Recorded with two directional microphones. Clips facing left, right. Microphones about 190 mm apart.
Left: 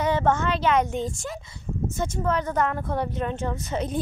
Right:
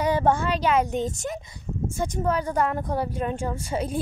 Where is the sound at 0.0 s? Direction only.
10° right (ahead or behind).